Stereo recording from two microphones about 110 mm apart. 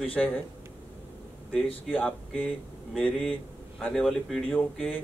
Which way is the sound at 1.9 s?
10° left (ahead or behind).